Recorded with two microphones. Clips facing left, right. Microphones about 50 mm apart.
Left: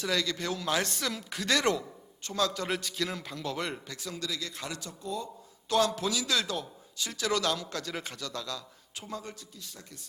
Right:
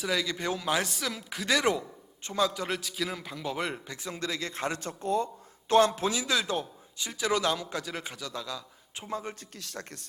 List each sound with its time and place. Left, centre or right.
0.0 s speech: centre
2.6 s speech: centre
3.9 s speech: right
9.0 s speech: right
9.6 s speech: right